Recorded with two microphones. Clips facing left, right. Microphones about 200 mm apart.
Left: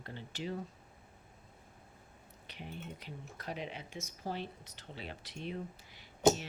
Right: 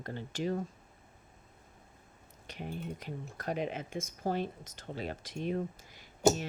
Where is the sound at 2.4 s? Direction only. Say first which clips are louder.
Right 6 dB; 45° right (ahead or behind).